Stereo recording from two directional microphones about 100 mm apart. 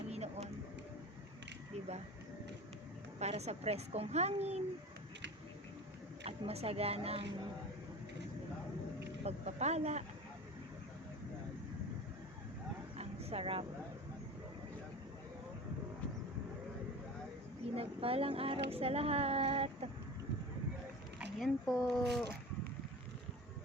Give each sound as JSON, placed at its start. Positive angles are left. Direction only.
{"t": 0.1, "sound": "vehicle", "side_deg": -90}
{"t": 3.2, "sound": "a woman's voice", "side_deg": -90}
{"t": 6.2, "sound": "speech", "side_deg": -90}
{"t": 9.2, "sound": "a woman's voice", "side_deg": -90}
{"t": 13.0, "sound": "vehicle", "side_deg": -80}
{"t": 17.7, "sound": "speech", "side_deg": -75}
{"t": 21.3, "sound": "a sound", "side_deg": 0}
{"t": 21.8, "sound": "speech", "side_deg": 0}